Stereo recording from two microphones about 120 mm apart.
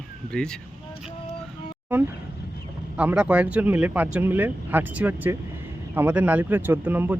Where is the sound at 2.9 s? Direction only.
10° right (ahead or behind).